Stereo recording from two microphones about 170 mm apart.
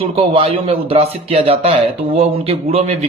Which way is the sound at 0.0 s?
30° right (ahead or behind).